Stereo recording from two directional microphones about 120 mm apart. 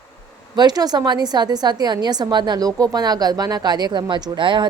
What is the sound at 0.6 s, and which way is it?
A woman's voice, 35° right (ahead or behind).